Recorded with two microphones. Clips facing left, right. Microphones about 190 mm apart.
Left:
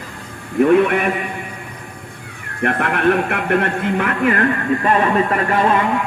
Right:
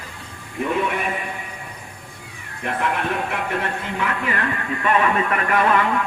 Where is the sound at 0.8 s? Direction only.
65° left (ahead or behind).